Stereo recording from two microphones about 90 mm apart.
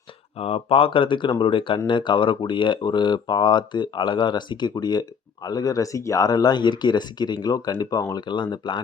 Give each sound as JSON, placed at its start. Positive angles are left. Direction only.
{"t": 0.3, "sound": "speech", "side_deg": 90}
{"t": 1.9, "sound": "speech", "side_deg": 60}